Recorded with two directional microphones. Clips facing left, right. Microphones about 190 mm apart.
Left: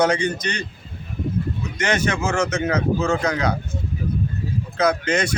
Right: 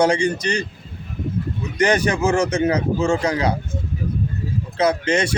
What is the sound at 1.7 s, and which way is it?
A man's voice, 35° right (ahead or behind).